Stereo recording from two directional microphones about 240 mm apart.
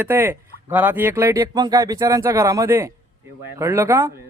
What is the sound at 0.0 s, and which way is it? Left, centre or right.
Speech, centre.